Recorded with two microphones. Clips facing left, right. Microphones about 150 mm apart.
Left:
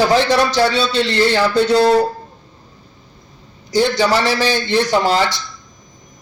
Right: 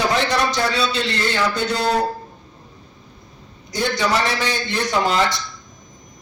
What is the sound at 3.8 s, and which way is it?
Speech, 30° left (ahead or behind).